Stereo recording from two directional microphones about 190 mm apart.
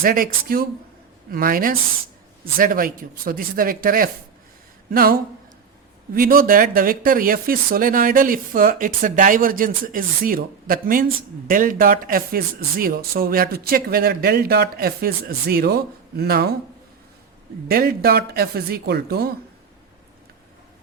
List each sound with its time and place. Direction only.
0.0 s speech: 50° right (ahead or behind)
17.7 s speech: 55° right (ahead or behind)